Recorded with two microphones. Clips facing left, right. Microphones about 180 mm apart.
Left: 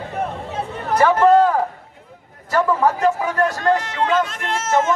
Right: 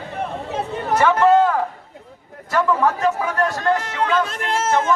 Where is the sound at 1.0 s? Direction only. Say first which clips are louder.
Left 2 dB; 10° left (ahead or behind).